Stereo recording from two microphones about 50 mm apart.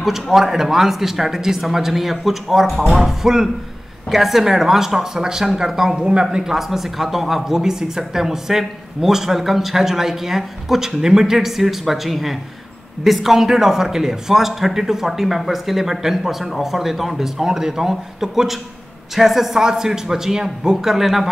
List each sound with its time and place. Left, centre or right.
0.0 s a man's voice: centre